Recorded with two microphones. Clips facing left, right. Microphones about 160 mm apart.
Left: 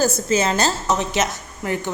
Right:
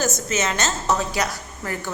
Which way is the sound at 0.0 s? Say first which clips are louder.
Left 5 dB; 30° left (ahead or behind).